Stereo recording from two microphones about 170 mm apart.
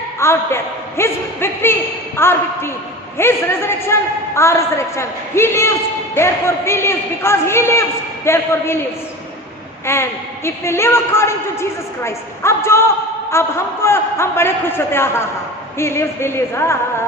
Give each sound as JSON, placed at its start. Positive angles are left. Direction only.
{"t": 0.2, "sound": "a man's voice", "side_deg": 15}
{"t": 9.8, "sound": "a man's voice", "side_deg": 15}